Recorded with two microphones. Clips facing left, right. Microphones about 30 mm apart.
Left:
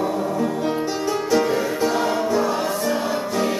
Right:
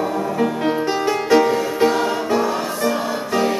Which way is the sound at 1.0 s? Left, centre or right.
Right.